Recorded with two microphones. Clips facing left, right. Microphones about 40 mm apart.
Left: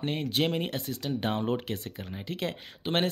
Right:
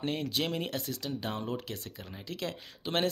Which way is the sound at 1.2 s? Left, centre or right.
Left.